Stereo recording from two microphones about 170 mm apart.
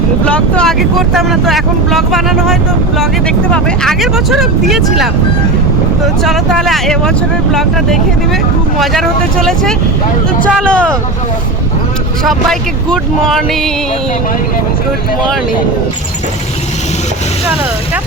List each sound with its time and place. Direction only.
0.3 s speech: 5° left (ahead or behind)
6.2 s speech: centre (ahead or behind)
12.2 s speech: centre (ahead or behind)